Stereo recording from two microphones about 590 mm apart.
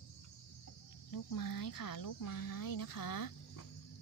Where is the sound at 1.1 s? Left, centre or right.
Left.